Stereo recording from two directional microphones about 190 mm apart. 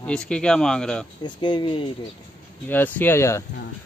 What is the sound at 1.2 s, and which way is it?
Speech, 25° left (ahead or behind).